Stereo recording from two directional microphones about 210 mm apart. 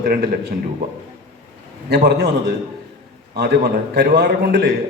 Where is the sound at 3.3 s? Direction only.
45° right (ahead or behind).